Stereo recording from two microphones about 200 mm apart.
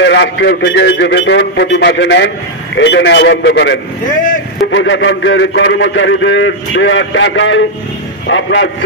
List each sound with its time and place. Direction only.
0.0 s a man's voice: 60° left (ahead or behind)